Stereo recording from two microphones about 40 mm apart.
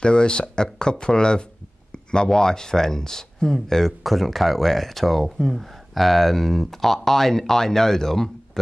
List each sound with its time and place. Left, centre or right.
0.0 s speech: left